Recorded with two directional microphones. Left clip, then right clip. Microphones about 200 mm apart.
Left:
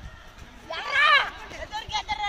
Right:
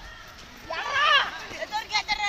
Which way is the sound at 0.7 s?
35° left (ahead or behind).